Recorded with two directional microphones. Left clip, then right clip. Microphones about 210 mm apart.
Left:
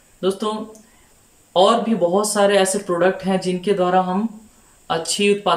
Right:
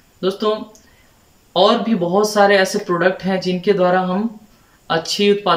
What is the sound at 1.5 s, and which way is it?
Speech, 5° left (ahead or behind).